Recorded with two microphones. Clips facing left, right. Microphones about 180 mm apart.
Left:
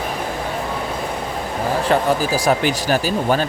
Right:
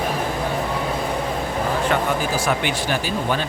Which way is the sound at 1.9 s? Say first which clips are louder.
Left 4 dB; 40° left (ahead or behind).